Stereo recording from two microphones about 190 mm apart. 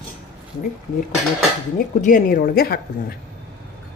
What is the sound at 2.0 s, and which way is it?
Speech, 40° left (ahead or behind).